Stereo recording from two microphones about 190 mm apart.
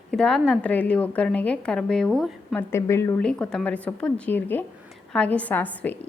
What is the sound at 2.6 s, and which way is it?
A woman's voice, 15° left (ahead or behind).